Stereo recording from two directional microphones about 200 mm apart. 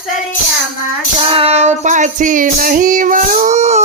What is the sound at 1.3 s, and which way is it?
Child singing, 30° right (ahead or behind).